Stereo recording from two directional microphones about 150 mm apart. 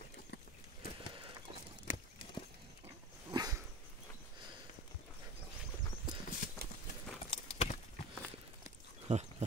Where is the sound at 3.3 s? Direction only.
25° right (ahead or behind).